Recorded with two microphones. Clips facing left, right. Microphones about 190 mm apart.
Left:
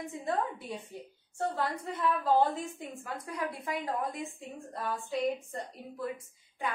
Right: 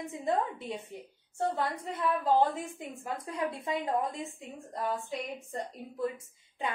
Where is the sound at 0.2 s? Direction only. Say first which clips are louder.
Right 3 dB; 20° right (ahead or behind).